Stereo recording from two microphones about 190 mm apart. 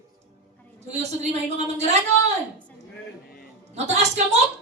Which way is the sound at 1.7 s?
35° right (ahead or behind).